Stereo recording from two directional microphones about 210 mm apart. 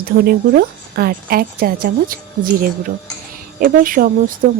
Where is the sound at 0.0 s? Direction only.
45° right (ahead or behind).